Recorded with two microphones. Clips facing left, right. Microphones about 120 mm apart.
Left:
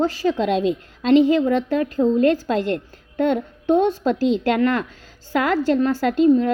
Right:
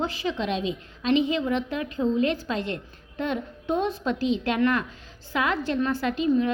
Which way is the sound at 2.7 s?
60° left (ahead or behind).